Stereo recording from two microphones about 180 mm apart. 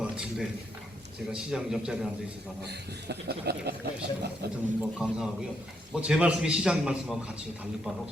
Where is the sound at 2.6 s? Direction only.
65° right (ahead or behind).